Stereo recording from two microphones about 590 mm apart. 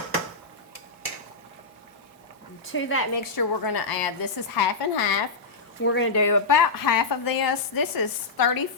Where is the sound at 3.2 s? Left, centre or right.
Left.